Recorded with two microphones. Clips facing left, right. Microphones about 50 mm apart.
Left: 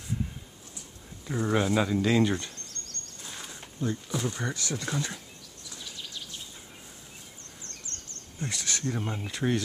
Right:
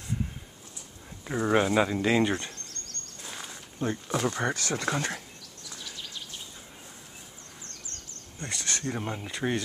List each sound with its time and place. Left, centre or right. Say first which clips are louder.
1.2 s speech: right 2 dB; right
3.2 s a sound: right 2 dB; centre
3.8 s speech: right 2 dB; right
4.8 s speech: right 4 dB; right
8.4 s speech: even; centre